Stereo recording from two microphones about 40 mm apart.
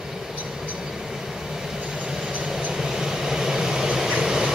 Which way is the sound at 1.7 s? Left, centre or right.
Centre.